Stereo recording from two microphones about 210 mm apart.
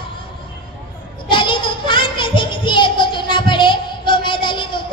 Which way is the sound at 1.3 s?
25° left (ahead or behind).